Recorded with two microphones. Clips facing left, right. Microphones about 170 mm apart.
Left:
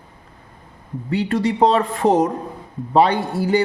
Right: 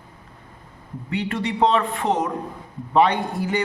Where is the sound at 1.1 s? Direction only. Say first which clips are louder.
Left 6 dB; 35° left (ahead or behind).